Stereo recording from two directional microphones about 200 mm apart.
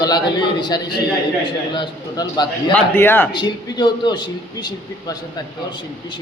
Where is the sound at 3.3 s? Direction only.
20° left (ahead or behind).